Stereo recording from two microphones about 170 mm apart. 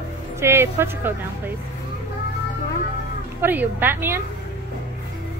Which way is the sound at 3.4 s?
10° right (ahead or behind).